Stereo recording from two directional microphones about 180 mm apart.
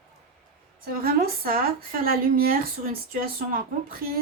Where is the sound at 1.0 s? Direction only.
55° right (ahead or behind).